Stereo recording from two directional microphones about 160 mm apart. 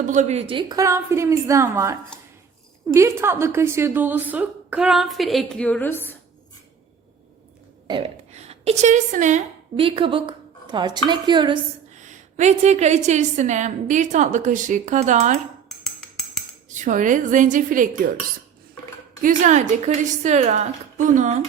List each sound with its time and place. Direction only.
0.1 s a woman's voice: 45° right (ahead or behind); by 6.1 s 10° left (ahead or behind)
7.9 s a sound: 30° right (ahead or behind)
8.3 s a woman's voice: 40° right (ahead or behind)
9.7 s a woman's voice: 35° right (ahead or behind)
11.9 s a woman's voice: 50° right (ahead or behind)
15.8 s a sound: 5° left (ahead or behind)
16.6 s a woman's voice: 50° right (ahead or behind)
19.2 s a woman's voice: 50° right (ahead or behind)